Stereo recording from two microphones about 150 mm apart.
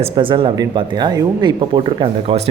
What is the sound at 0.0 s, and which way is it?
Speech, 35° right (ahead or behind).